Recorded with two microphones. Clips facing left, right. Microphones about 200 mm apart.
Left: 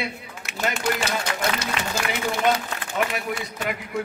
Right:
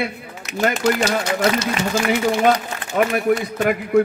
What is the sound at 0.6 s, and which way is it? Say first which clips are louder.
Speech: right 7 dB; 40° right (ahead or behind).